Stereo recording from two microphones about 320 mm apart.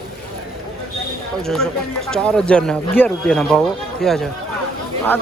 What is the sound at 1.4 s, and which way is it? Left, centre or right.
Speech, centre.